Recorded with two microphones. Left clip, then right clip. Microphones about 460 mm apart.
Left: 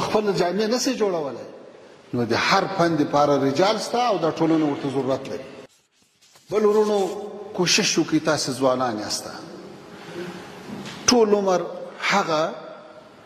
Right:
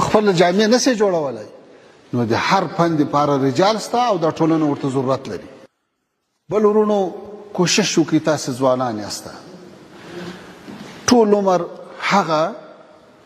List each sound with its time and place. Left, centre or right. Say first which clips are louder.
0.0 s speech: right 7 dB; right
2.1 s a man's voice: right 3 dB; right
6.5 s a man's voice: right 4 dB; right
11.1 s a woman's voice: right 4 dB; right